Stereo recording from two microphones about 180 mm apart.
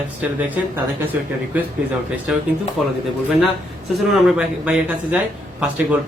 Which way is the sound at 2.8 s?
5° right (ahead or behind).